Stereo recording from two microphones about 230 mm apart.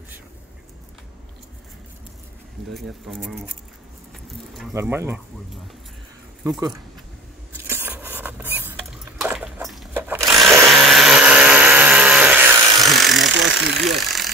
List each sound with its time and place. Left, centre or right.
2.7 s speech: centre
4.7 s speech: centre
7.5 s rodents: centre
10.7 s vehicle: centre
13.3 s vehicle: right
13.7 s vehicle: centre